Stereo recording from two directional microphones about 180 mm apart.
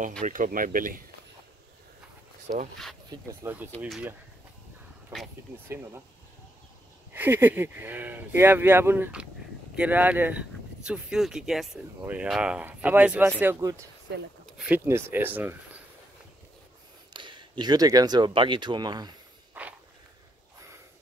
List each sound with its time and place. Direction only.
0.2 s speech: 45° right (ahead or behind)
3.4 s speech: 15° right (ahead or behind)
5.7 s speech: 10° right (ahead or behind)
7.2 s speech: 10° right (ahead or behind)
14.4 s a sound: 5° right (ahead or behind)
14.9 s speech: 15° right (ahead or behind)
17.1 s speech: 25° right (ahead or behind)
19.6 s walk: 10° right (ahead or behind)